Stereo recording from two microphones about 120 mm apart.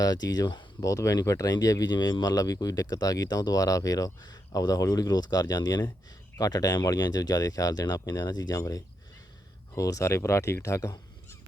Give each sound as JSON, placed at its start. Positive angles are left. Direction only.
{"t": 0.0, "sound": "speech", "side_deg": 35}